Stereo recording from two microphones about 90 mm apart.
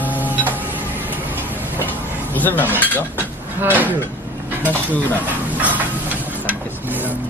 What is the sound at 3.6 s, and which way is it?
Speech, 20° right (ahead or behind).